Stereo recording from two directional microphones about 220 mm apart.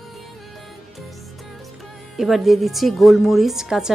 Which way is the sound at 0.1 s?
Centre (ahead or behind).